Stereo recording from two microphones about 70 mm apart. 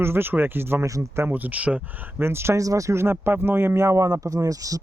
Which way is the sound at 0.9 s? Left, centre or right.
Right.